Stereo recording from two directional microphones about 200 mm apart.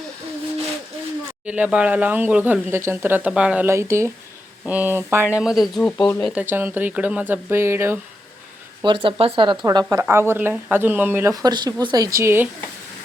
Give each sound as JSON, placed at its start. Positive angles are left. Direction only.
{"t": 1.5, "sound": "speech", "side_deg": -5}
{"t": 6.2, "sound": "speech", "side_deg": -10}
{"t": 8.8, "sound": "speech", "side_deg": -25}